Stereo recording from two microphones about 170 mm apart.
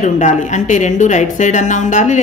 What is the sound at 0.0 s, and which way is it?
A woman's voice, 45° left (ahead or behind).